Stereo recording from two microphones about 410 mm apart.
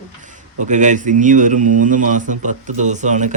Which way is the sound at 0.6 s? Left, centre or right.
Centre.